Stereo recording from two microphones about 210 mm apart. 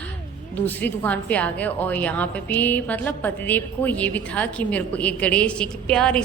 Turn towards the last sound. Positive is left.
turn(degrees=5)  # may be behind; listen again after turning